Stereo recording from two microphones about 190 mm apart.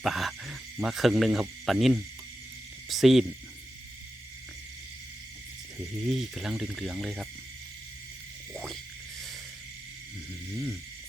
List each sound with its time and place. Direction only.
0.0 s speech: centre (ahead or behind)
6.1 s speech: centre (ahead or behind)
8.5 s frog: centre (ahead or behind)